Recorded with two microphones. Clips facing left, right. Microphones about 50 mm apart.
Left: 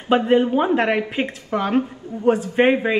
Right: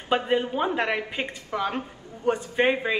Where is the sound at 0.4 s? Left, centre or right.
Left.